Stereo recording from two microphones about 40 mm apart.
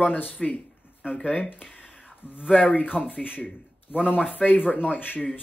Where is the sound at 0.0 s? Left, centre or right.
Left.